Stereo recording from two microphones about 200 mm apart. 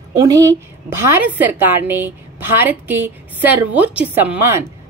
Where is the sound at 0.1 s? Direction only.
15° right (ahead or behind).